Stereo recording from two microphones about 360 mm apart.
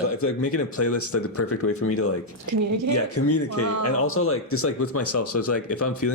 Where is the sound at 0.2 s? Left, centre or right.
Left.